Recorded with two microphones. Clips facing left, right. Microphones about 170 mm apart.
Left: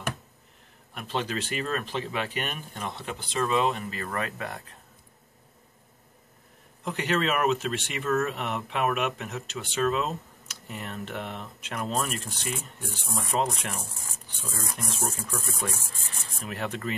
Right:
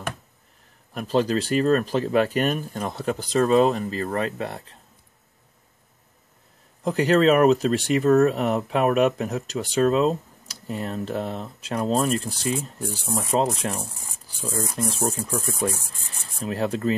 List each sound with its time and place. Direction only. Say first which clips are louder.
0.9 s speech: right 9 dB; 40° right (ahead or behind)
6.8 s speech: right 9 dB; 35° right (ahead or behind)
16.2 s rub: right 8 dB; 35° right (ahead or behind)